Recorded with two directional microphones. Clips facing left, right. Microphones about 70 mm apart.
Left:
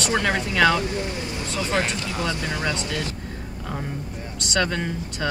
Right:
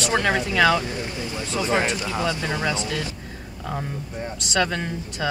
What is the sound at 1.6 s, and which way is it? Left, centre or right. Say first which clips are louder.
Speech: right 2 dB; centre.